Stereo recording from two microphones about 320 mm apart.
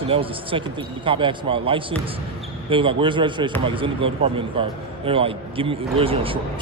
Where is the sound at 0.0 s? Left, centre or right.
Centre.